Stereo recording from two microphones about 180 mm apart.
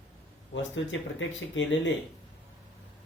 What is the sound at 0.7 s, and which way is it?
Speech, 90° left.